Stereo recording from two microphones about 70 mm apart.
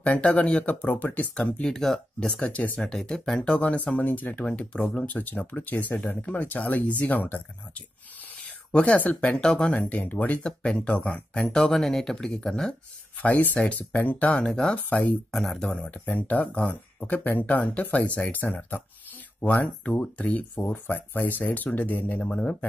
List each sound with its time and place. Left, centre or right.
0.0 s speech: centre
1.3 s speech: centre
2.9 s speech: centre
9.8 s speech: left
13.2 s speech: left
14.9 s speech: left
15.3 s speech: centre
16.1 s speech: left
22.2 s speech: centre